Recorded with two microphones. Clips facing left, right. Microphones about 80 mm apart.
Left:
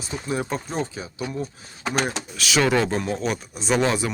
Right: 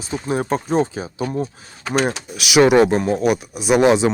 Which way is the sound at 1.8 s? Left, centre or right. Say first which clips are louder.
Right 5 dB; centre.